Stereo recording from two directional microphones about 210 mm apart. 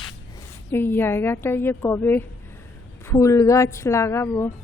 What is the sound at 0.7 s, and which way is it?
A woman's voice, 10° left (ahead or behind).